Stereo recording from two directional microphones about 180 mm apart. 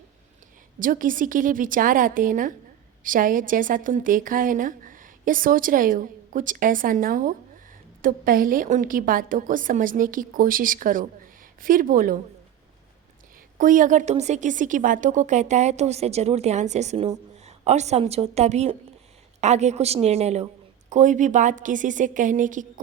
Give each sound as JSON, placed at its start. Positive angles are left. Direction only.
{"t": 0.8, "sound": "a woman's voice", "side_deg": -50}
{"t": 13.6, "sound": "a woman's voice", "side_deg": -50}